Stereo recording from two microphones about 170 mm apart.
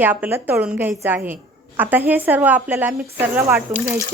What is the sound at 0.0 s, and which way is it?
Speech, 10° right (ahead or behind).